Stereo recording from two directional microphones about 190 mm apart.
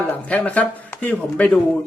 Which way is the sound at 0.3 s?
5° left (ahead or behind).